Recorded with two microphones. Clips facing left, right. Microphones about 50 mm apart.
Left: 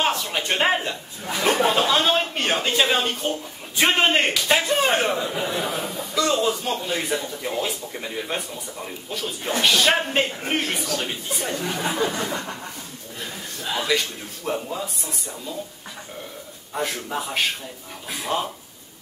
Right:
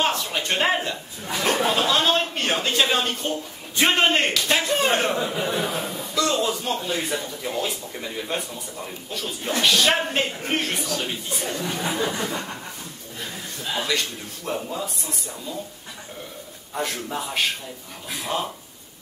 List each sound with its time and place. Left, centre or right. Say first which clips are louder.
0.0 s a sound: even; centre
0.3 s a man's voice: left 1 dB; centre
14.4 s a man's voice: left 1 dB; centre
16.7 s a man's voice: left 1 dB; centre